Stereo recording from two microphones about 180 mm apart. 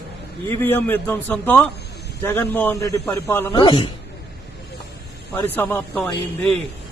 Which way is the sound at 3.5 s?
25° left (ahead or behind).